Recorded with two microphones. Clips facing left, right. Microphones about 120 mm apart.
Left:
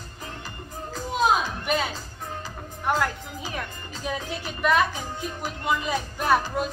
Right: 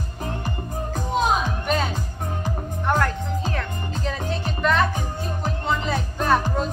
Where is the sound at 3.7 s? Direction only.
55° right (ahead or behind).